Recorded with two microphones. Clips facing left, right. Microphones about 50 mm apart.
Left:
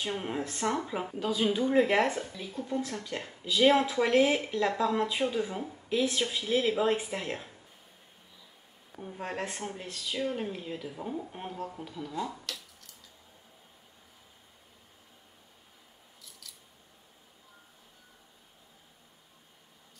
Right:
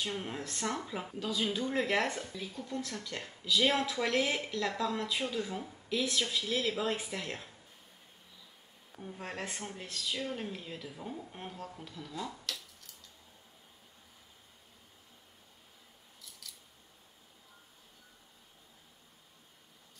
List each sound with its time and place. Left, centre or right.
0.0 s speech: centre
8.9 s speech: centre
12.4 s a sound: centre
16.2 s scissors: centre